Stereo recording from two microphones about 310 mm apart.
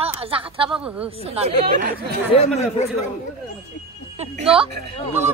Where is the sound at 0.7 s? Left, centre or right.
Centre.